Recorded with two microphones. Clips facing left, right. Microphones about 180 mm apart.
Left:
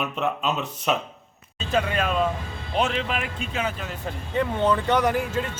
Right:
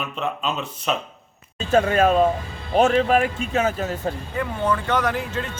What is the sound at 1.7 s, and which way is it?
Speech, 45° right (ahead or behind).